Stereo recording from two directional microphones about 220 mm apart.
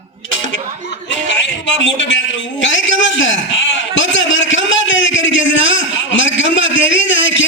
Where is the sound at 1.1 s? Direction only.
55° left (ahead or behind).